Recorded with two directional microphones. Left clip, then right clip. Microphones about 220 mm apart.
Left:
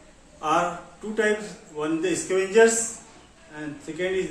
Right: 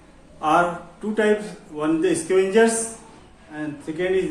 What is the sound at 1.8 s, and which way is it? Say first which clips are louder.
Speech: right 5 dB; 25° right (ahead or behind).